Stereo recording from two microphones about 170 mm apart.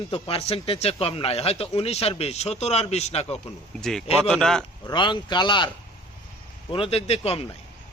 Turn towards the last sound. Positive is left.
turn(degrees=35)  # may be behind; listen again after turning